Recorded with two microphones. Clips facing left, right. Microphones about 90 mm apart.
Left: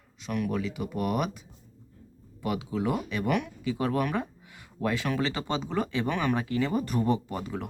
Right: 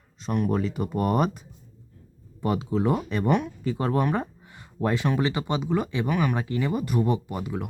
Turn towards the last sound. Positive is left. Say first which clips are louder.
# right 3 dB
turn(degrees=-10)  # may be behind; listen again after turning